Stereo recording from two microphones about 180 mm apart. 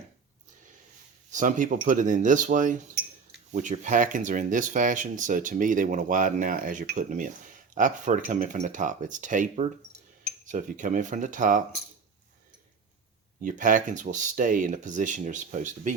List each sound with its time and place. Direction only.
1.3 s speech: 45° right (ahead or behind)
13.4 s speech: 45° right (ahead or behind)